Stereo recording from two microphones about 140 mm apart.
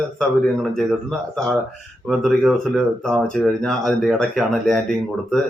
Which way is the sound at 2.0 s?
Centre (ahead or behind).